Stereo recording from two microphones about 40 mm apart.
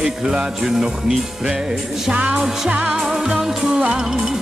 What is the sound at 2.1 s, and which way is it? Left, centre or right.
Music, right.